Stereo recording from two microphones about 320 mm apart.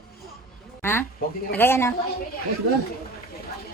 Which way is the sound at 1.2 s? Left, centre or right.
Left.